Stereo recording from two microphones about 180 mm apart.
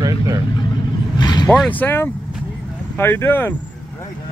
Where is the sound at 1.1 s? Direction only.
25° left (ahead or behind).